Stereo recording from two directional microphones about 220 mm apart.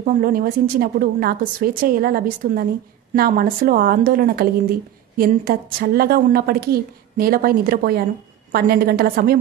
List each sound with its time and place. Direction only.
0.0 s a woman's voice: 40° right (ahead or behind)